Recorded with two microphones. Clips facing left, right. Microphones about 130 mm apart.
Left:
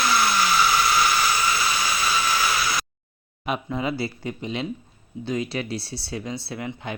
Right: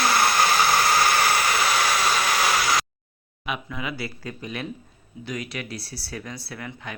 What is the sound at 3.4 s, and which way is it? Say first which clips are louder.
Speech: left 5 dB; 35° left (ahead or behind).